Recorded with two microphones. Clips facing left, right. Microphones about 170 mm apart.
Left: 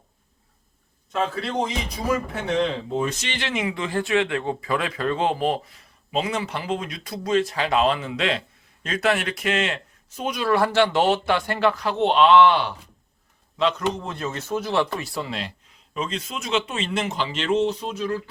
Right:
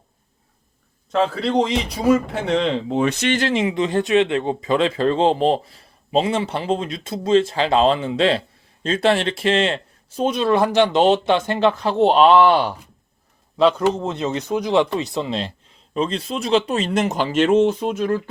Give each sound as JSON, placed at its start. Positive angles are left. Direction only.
{"t": 1.1, "sound": "a man's voice", "side_deg": -70}
{"t": 3.3, "sound": "a man's voice", "side_deg": -35}